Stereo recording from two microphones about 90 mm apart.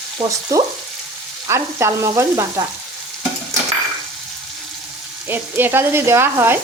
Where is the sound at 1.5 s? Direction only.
35° right (ahead or behind).